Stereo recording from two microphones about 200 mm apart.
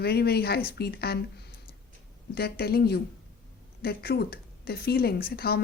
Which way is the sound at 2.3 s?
50° left (ahead or behind).